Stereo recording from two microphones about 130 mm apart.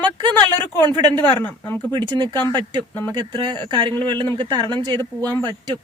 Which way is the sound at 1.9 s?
35° right (ahead or behind).